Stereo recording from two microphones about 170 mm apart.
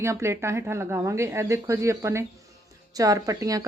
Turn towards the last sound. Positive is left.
turn(degrees=-20)  # may be behind; listen again after turning